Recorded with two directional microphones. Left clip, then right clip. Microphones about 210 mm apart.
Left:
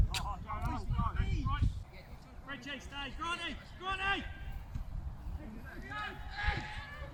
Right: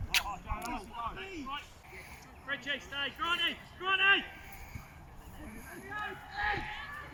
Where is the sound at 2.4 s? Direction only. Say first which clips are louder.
Right 7 dB; 60° left (ahead or behind).